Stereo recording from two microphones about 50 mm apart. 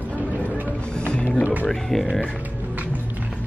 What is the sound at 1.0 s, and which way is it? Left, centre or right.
Music, left.